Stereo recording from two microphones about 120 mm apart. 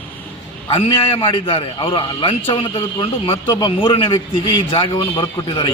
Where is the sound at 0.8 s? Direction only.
50° left (ahead or behind).